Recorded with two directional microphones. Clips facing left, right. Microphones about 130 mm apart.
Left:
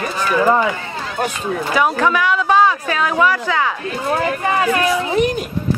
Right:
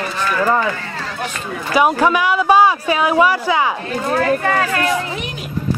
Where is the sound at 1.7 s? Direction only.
10° right (ahead or behind).